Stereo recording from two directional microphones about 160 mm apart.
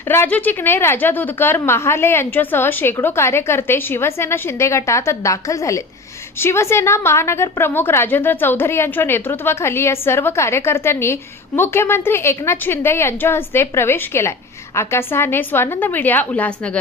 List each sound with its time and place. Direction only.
0.1 s a woman's voice: 10° left (ahead or behind)